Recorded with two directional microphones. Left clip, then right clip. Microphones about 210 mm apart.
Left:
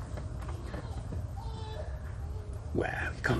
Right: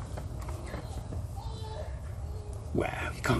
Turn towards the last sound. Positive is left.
turn(degrees=-35)  # may be behind; listen again after turning